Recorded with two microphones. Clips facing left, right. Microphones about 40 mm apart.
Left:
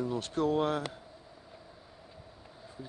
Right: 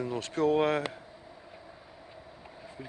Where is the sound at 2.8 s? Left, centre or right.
Right.